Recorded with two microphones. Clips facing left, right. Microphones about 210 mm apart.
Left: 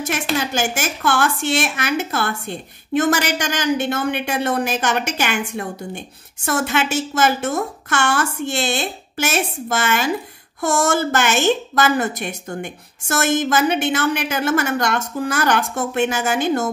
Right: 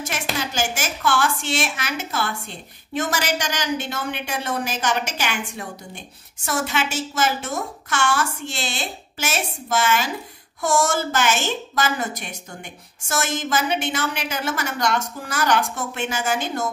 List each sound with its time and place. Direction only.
0.5 s a woman's voice: 55° left (ahead or behind)